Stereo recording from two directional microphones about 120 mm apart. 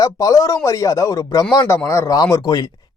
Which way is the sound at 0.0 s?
30° left (ahead or behind).